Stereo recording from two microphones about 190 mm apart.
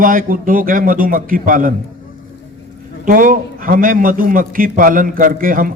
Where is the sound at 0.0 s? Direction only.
45° right (ahead or behind).